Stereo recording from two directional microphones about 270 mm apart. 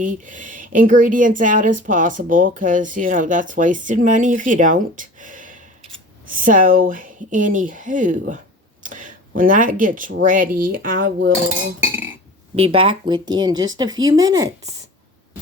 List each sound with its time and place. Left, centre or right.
0.0 s speech: right
12.5 s speech: centre